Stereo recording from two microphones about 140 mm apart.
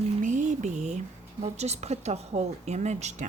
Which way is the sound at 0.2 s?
60° right (ahead or behind).